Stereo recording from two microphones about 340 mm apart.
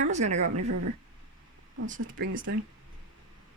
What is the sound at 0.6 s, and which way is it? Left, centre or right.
Speech, right.